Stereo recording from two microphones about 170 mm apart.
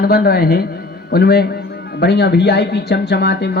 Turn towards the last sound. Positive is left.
turn(degrees=75)  # may be behind; listen again after turning